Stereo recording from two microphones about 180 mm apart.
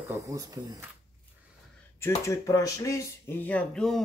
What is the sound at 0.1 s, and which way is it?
Speech, 20° right (ahead or behind).